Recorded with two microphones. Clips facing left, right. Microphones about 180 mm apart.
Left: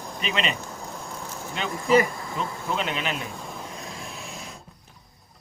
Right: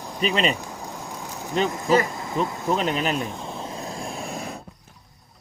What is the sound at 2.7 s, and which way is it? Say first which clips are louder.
Speech: right 4 dB; 40° right (ahead or behind).